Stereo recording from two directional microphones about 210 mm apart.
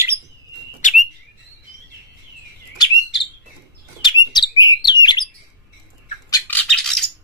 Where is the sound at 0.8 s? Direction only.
35° left (ahead or behind).